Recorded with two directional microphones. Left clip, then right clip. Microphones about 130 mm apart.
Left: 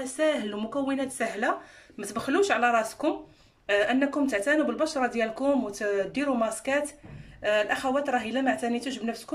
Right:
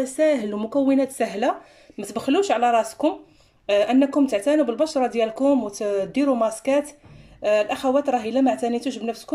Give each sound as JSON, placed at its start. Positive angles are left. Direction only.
{"t": 0.0, "sound": "speech", "side_deg": -35}